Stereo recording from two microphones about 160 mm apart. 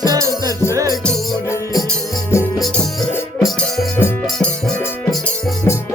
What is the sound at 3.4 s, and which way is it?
Music, centre (ahead or behind).